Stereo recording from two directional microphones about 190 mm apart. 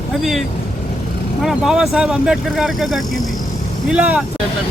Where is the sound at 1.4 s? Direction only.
Centre (ahead or behind).